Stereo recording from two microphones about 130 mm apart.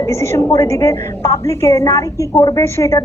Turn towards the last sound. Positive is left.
turn(degrees=20)  # may be behind; listen again after turning